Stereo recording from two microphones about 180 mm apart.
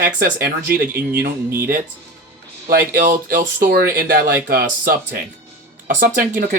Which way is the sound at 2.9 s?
50° right (ahead or behind).